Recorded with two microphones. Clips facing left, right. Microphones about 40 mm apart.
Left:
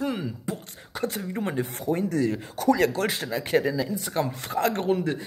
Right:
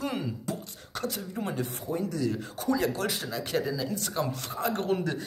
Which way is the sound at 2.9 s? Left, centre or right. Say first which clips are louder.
Left 4 dB; left.